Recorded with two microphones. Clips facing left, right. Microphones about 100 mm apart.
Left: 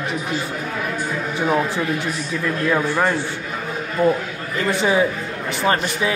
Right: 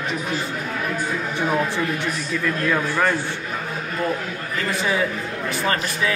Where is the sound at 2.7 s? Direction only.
15° left (ahead or behind).